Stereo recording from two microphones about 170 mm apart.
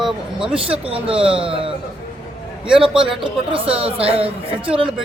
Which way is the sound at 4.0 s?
35° right (ahead or behind).